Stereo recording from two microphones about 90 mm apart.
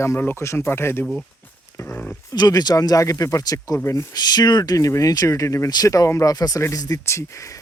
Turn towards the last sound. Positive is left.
turn(degrees=35)  # may be behind; listen again after turning